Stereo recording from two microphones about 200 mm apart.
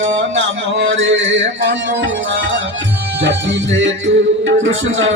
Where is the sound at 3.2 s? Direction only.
65° right (ahead or behind).